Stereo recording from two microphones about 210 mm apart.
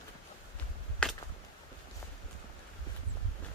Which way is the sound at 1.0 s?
5° left (ahead or behind).